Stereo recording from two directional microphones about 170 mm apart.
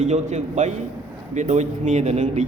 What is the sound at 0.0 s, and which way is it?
A man's voice, 40° right (ahead or behind).